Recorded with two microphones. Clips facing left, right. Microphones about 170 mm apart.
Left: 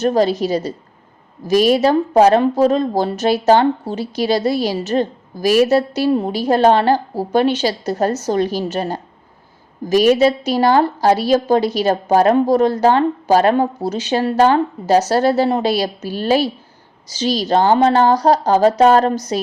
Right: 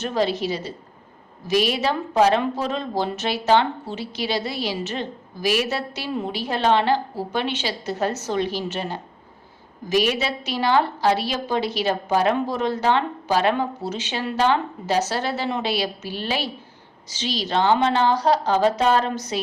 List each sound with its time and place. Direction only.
0.0 s a woman's voice: 40° left (ahead or behind)